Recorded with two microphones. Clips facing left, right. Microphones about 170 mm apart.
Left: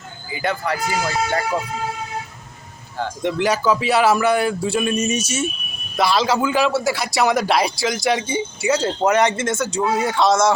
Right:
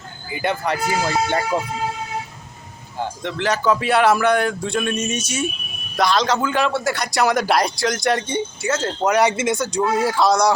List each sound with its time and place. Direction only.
0.4 s speech: 25° right (ahead or behind)
3.2 s a man's voice: 15° left (ahead or behind)
9.1 s speech: 5° right (ahead or behind)
9.7 s a man's voice: 5° left (ahead or behind)